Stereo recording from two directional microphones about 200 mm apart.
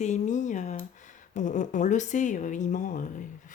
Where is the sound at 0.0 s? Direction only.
35° left (ahead or behind).